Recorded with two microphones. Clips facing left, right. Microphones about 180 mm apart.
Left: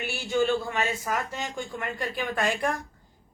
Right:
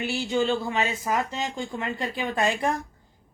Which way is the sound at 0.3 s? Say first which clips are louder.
Left 1 dB; 20° right (ahead or behind).